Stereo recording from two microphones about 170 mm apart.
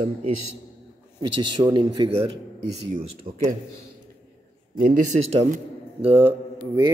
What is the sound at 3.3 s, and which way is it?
Speech, 60° right (ahead or behind).